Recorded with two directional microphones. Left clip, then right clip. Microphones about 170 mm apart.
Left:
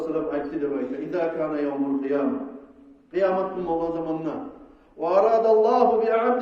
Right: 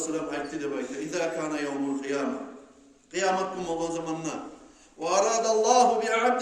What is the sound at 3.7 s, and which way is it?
A man's voice, 20° right (ahead or behind).